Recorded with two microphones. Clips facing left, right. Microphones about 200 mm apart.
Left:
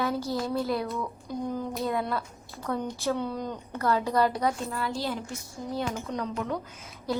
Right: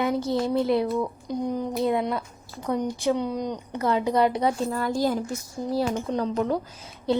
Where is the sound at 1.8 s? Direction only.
20° right (ahead or behind).